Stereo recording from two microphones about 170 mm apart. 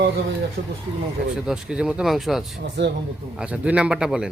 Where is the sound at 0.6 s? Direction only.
90° right.